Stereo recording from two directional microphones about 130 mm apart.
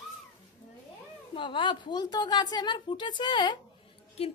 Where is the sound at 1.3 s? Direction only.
40° left (ahead or behind).